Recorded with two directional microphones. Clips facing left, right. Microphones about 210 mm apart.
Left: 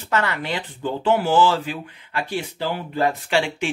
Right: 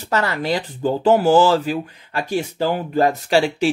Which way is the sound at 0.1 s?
40° right (ahead or behind).